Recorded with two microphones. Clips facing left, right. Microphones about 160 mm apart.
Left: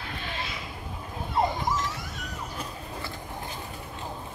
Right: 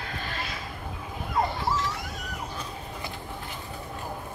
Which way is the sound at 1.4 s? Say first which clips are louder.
Left 2 dB; 15° left (ahead or behind).